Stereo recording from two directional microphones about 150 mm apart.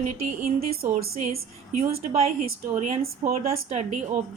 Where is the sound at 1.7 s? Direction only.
45° right (ahead or behind).